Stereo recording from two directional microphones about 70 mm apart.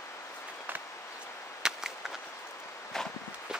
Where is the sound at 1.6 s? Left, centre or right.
Centre.